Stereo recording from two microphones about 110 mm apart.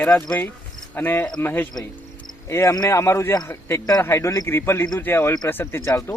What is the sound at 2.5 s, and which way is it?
Speech, 25° left (ahead or behind).